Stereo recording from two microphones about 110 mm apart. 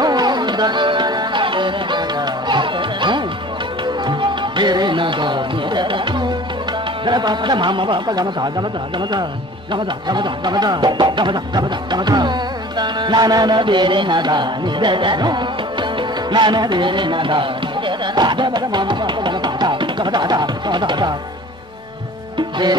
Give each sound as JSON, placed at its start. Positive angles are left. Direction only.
{"t": 0.0, "sound": "music", "side_deg": -40}
{"t": 7.1, "sound": "a man's voice", "side_deg": -40}
{"t": 9.7, "sound": "music", "side_deg": -45}